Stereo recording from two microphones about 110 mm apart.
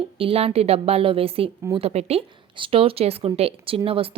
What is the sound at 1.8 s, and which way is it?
Speech, 70° right (ahead or behind).